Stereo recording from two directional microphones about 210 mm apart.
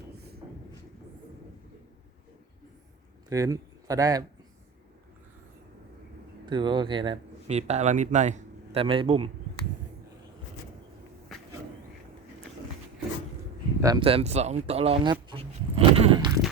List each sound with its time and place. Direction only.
3.2 s speech: 15° right (ahead or behind)
6.4 s speech: 20° right (ahead or behind)
13.8 s speech: 20° right (ahead or behind)